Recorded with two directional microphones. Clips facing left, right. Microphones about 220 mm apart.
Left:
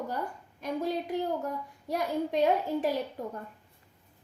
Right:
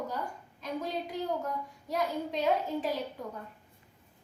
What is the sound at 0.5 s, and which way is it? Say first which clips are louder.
A child's voice: left 4 dB; 50° left (ahead or behind).